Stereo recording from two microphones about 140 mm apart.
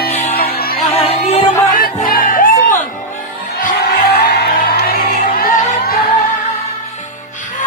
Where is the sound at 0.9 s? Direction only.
45° left (ahead or behind).